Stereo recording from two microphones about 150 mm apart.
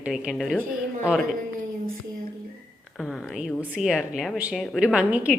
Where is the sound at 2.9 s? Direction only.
Centre (ahead or behind).